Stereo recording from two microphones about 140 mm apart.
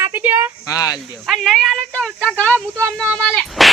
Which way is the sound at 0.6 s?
25° left (ahead or behind).